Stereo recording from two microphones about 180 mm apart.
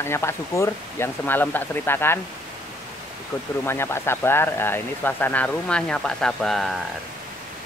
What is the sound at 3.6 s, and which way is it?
Speech, 15° left (ahead or behind).